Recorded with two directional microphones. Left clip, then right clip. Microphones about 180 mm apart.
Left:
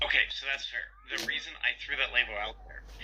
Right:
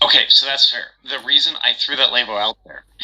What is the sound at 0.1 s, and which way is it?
Speech, 60° right (ahead or behind).